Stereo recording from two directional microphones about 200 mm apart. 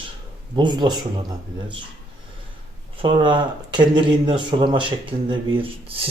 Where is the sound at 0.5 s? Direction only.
20° right (ahead or behind).